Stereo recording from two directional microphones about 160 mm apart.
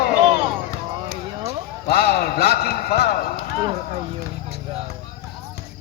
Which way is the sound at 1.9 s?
80° left.